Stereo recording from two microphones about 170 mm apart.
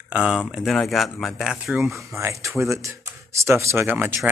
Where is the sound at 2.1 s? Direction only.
15° right (ahead or behind).